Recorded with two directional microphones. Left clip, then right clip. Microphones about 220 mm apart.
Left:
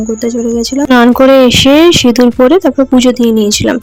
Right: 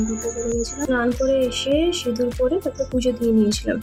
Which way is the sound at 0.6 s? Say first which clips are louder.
Left 16 dB; 40° left (ahead or behind).